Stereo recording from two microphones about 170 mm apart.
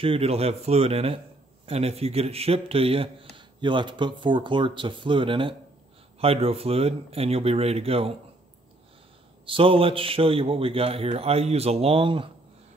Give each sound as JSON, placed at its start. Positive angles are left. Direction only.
{"t": 0.0, "sound": "speech", "side_deg": -35}
{"t": 9.5, "sound": "speech", "side_deg": -30}